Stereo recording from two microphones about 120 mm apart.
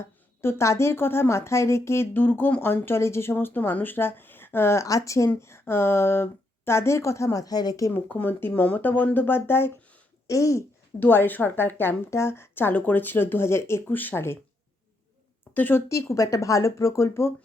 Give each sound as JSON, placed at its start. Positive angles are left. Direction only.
{"t": 0.4, "sound": "a woman's voice", "side_deg": 25}
{"t": 8.1, "sound": "speech", "side_deg": 15}
{"t": 15.5, "sound": "a woman's voice", "side_deg": 15}